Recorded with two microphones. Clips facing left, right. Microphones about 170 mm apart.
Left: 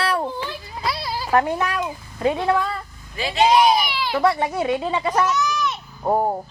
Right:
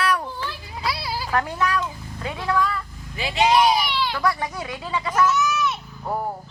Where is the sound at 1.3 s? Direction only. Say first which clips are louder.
Left 4 dB; 30° left (ahead or behind).